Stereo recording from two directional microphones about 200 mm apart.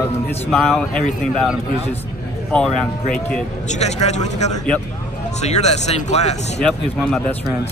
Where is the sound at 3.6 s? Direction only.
35° left (ahead or behind).